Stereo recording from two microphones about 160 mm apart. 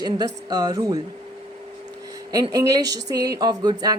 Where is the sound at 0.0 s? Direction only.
25° right (ahead or behind).